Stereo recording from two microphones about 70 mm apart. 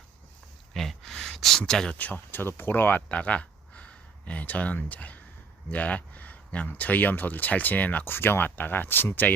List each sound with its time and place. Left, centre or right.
0.7 s a sound: centre
2.0 s speech: left
3.1 s speech: centre